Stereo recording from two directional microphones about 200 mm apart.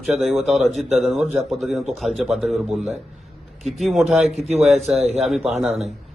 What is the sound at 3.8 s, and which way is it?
Speech, centre (ahead or behind).